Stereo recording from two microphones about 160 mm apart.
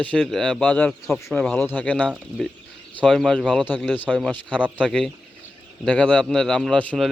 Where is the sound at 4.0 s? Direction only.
5° left (ahead or behind).